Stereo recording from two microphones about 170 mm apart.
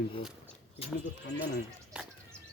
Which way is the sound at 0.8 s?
35° left (ahead or behind).